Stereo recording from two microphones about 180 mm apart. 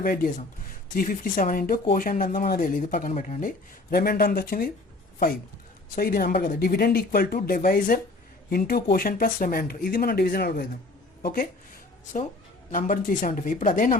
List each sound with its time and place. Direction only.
0.0 s speech: 55° left (ahead or behind)
6.0 s speech: 55° left (ahead or behind)
12.7 s speech: 50° left (ahead or behind)